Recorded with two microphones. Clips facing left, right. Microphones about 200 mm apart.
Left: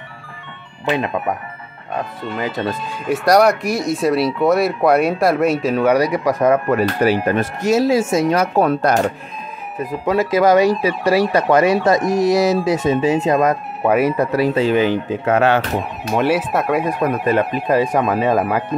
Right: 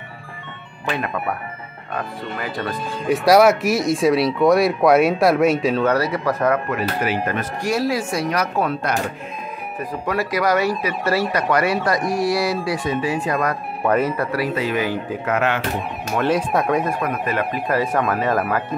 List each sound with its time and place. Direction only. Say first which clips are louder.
0.8 s speech: left 5 dB; 20° left (ahead or behind)
2.3 s speech: left 5 dB; 20° left (ahead or behind)
3.1 s speech: even; centre (ahead or behind)
5.8 s speech: left 4 dB; 15° left (ahead or behind)
6.7 s speech: left 7 dB; 40° left (ahead or behind)
8.6 s speech: left 7 dB; 40° left (ahead or behind)
9.8 s speech: left 6 dB; 20° left (ahead or behind)
13.8 s speech: left 4 dB; 10° left (ahead or behind); by 15.6 s 30° left (ahead or behind)
16.2 s speech: left 2 dB; 5° left (ahead or behind)
17.0 s speech: left 6 dB; 30° left (ahead or behind)
17.6 s speech: left 2 dB; 15° left (ahead or behind)